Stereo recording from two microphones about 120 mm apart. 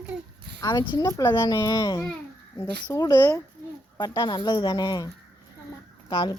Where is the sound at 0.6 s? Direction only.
40° left (ahead or behind); by 1.5 s 20° left (ahead or behind).